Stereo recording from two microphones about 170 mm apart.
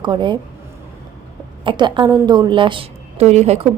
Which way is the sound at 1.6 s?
25° right (ahead or behind).